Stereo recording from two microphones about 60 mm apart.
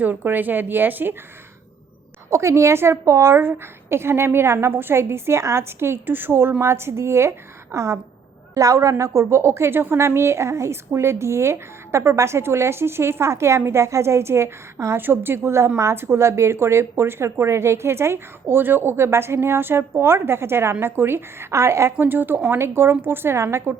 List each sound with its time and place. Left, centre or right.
0.0 s speech: right
2.3 s a woman's voice: right
8.5 s a woman's voice: right
14.9 s a woman's voice: right
21.9 s a woman's voice: right